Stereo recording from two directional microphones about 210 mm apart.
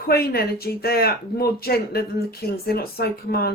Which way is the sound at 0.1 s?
50° left (ahead or behind).